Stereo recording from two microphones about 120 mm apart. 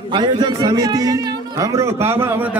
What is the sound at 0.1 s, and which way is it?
A man's voice, 40° right (ahead or behind).